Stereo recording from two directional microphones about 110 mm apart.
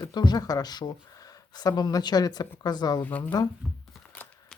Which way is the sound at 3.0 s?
15° left (ahead or behind).